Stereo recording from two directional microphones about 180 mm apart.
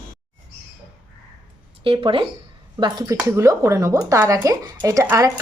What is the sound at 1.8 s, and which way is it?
Speech, 30° right (ahead or behind).